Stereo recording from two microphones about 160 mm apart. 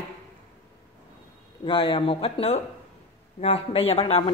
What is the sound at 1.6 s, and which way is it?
Speech, 35° left (ahead or behind).